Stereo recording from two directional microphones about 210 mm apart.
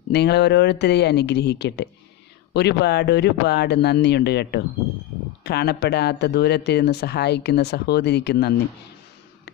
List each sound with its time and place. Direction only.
0.1 s speech: 50° left (ahead or behind)